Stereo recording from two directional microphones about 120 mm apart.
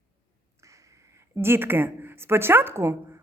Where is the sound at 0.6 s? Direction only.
25° right (ahead or behind).